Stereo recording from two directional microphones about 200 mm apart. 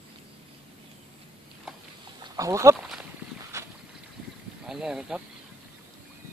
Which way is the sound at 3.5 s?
15° right (ahead or behind).